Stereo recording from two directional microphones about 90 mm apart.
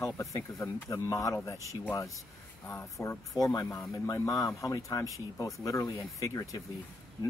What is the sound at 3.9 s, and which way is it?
Speech, 40° left (ahead or behind).